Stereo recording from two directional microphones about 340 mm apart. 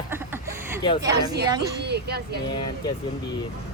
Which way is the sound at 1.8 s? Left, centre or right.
Right.